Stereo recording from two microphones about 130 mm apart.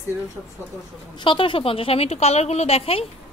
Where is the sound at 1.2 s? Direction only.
40° left (ahead or behind).